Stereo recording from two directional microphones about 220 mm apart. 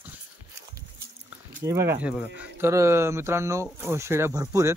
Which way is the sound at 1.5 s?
10° right (ahead or behind).